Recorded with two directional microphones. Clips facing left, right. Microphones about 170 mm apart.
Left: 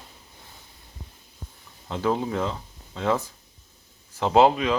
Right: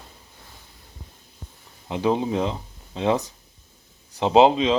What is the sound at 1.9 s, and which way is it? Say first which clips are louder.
Speech: right 3 dB; 15° right (ahead or behind).